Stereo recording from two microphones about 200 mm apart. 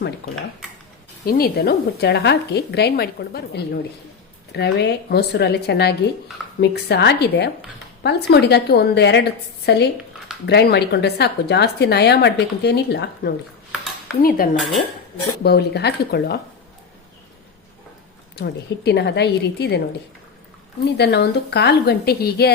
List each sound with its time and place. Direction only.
0.2 s a woman's voice: 55° left (ahead or behind)
14.2 s a woman's voice: 45° left (ahead or behind)
18.3 s a woman's voice: 55° left (ahead or behind)
21.0 s a woman's voice: 55° left (ahead or behind)